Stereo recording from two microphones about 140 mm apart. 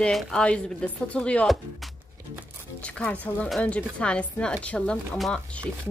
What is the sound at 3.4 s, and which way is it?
Speech, 5° left (ahead or behind).